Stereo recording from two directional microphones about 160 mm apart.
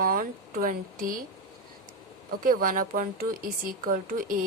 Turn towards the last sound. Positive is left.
turn(degrees=-60)  # may be behind; listen again after turning